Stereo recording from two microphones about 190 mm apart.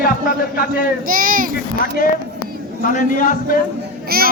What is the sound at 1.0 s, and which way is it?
Speech, 45° right (ahead or behind).